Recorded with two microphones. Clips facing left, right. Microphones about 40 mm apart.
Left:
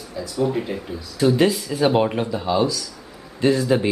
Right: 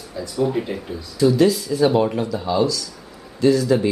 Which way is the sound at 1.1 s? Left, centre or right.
Left.